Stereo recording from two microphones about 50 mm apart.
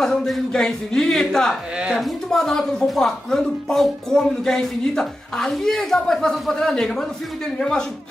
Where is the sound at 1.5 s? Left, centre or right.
Centre.